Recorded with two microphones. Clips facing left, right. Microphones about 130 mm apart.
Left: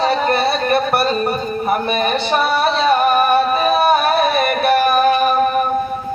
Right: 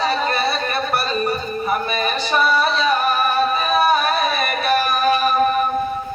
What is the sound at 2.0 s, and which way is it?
Music, 55° left (ahead or behind).